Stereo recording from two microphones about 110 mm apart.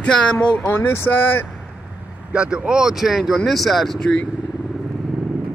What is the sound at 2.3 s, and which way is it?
Speech, 10° right (ahead or behind).